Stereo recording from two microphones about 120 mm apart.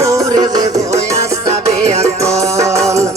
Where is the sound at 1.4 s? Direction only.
65° right (ahead or behind).